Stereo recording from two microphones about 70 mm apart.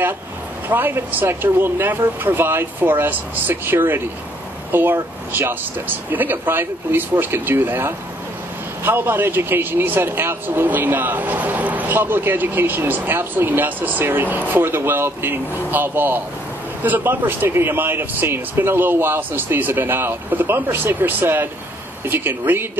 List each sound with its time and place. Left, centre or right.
0.7 s speech: right